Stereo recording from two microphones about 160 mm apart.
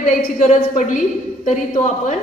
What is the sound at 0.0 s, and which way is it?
A woman's voice, 45° left (ahead or behind).